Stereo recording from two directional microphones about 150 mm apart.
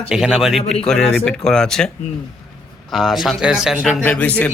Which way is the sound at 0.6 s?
45° left (ahead or behind).